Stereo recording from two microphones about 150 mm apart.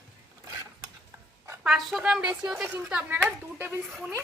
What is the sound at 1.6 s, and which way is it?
A woman's voice, centre (ahead or behind).